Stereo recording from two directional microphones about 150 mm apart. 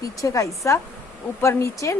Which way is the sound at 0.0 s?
20° left (ahead or behind).